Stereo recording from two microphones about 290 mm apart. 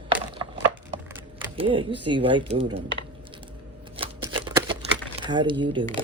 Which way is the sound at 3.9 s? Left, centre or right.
Centre.